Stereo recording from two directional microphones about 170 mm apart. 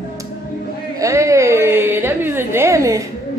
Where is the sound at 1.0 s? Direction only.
20° right (ahead or behind).